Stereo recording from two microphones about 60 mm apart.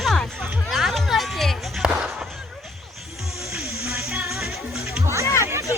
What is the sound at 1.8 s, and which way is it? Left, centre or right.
Fireworks, centre.